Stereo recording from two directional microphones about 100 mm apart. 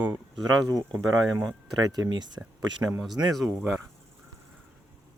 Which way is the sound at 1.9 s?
40° right (ahead or behind).